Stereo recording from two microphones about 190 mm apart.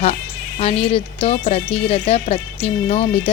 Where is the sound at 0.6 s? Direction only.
30° left (ahead or behind).